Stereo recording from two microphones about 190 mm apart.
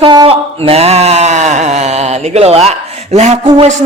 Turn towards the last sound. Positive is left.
turn(degrees=-35)  # may be behind; listen again after turning